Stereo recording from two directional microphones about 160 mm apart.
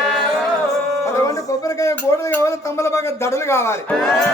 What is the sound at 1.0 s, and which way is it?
A man's voice, 20° left (ahead or behind).